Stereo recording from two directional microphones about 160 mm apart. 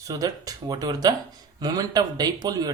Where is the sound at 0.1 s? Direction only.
20° right (ahead or behind).